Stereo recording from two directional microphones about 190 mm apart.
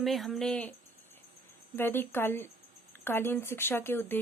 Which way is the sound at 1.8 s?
10° left (ahead or behind).